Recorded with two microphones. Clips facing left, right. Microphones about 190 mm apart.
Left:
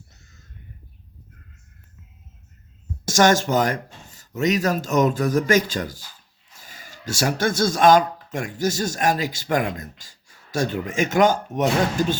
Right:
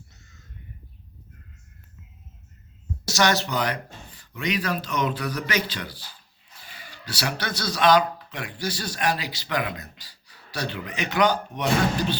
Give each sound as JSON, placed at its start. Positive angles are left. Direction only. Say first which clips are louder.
{"t": 3.1, "sound": "speech", "louder": "left 6 dB", "side_deg": 45}